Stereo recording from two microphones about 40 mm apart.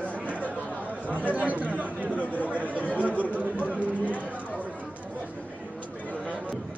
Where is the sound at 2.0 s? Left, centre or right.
Left.